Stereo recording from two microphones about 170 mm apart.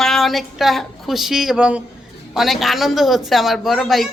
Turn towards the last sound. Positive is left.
turn(degrees=0)  # may be behind; listen again after turning